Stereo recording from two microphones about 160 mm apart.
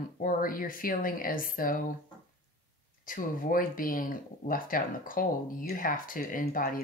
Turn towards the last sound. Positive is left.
turn(degrees=65)  # may be behind; listen again after turning